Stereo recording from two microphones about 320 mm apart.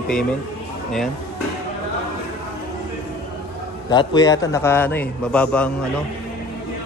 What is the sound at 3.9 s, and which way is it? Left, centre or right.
A man's voice, centre.